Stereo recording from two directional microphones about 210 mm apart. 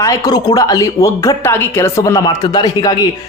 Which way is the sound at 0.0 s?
15° left (ahead or behind).